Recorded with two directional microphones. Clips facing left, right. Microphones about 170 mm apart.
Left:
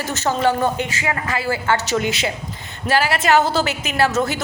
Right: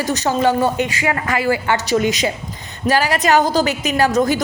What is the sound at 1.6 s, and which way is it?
A woman's voice, 15° right (ahead or behind).